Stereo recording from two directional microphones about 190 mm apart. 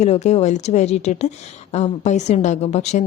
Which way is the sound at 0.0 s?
35° left (ahead or behind).